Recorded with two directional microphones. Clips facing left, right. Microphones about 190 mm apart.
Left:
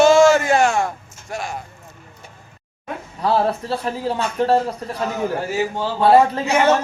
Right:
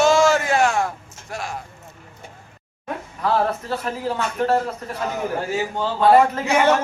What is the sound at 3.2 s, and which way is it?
A man's voice, 35° left (ahead or behind).